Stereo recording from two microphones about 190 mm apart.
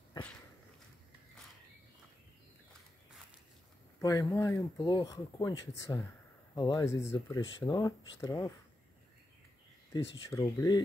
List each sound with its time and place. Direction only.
4.0 s speech: 20° left (ahead or behind)
10.4 s speech: 20° left (ahead or behind)